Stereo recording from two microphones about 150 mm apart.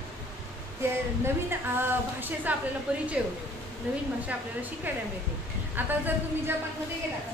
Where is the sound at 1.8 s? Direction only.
15° right (ahead or behind).